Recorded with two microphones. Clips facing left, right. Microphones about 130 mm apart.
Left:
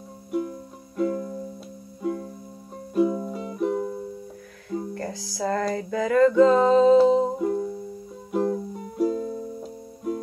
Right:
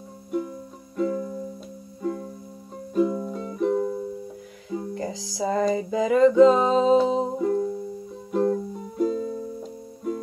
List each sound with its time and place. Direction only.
0.9 s music: 5° left (ahead or behind)
4.6 s music: 15° right (ahead or behind)
7.3 s music: 5° left (ahead or behind)